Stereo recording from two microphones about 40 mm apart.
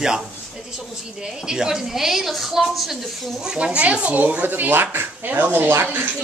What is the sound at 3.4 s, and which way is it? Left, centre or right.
Speech, centre.